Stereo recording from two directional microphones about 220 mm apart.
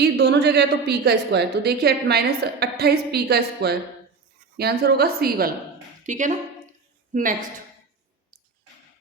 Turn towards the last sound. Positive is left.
turn(degrees=-35)  # may be behind; listen again after turning